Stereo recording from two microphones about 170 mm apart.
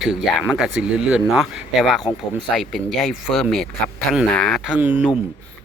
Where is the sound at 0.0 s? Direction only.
Centre (ahead or behind).